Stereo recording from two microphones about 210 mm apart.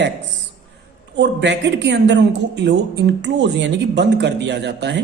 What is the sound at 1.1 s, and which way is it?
A man's voice, 55° right (ahead or behind).